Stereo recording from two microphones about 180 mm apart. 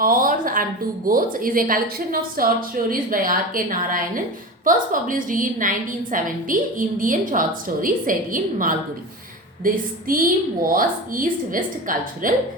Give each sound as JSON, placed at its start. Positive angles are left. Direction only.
{"t": 0.0, "sound": "a woman's voice", "side_deg": -50}